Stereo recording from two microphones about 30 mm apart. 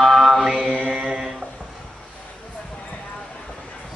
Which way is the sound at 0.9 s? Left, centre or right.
Right.